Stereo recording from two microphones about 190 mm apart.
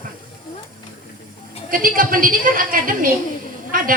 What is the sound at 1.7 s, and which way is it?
A woman's voice, 45° right (ahead or behind).